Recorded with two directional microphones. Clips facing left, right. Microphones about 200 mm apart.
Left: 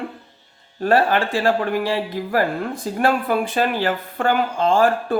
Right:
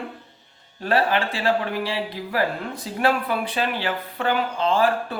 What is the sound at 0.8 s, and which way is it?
Speech, 50° left (ahead or behind).